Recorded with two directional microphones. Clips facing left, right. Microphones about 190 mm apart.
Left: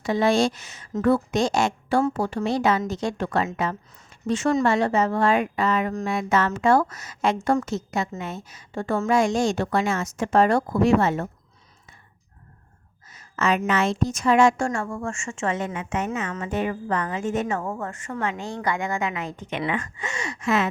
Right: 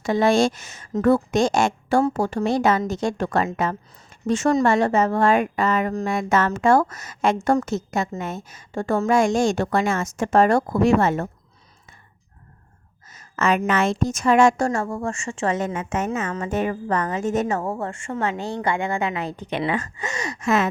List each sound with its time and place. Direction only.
0.0 s a woman's voice: 50° right (ahead or behind)
13.1 s a sound: 45° right (ahead or behind)
13.7 s a woman's voice: 50° right (ahead or behind)